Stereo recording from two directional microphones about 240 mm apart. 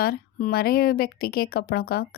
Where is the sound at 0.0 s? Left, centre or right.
Left.